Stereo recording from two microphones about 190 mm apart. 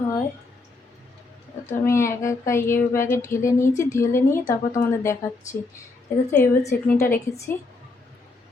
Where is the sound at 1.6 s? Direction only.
15° left (ahead or behind).